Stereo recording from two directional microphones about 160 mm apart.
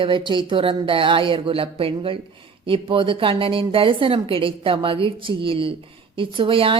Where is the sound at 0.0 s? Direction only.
30° right (ahead or behind).